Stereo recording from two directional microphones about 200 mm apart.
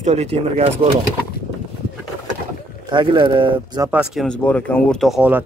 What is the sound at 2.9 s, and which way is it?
Speech, 25° right (ahead or behind).